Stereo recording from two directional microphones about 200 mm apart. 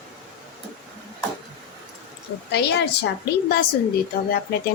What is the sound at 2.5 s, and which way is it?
A woman's voice, 55° left (ahead or behind).